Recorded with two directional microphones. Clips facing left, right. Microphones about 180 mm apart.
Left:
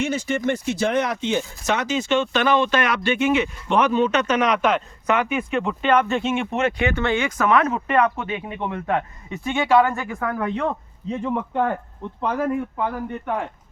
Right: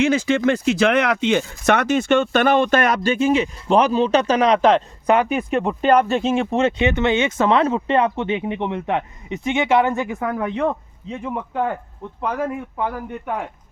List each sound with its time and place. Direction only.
0.0 s speech: 90° right; by 10.7 s 20° right (ahead or behind)
11.2 s speech: 5° right (ahead or behind)